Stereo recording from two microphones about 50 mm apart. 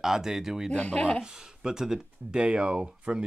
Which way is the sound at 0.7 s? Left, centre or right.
Left.